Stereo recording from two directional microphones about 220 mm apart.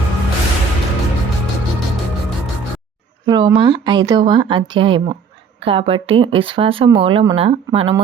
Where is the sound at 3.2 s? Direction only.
20° right (ahead or behind).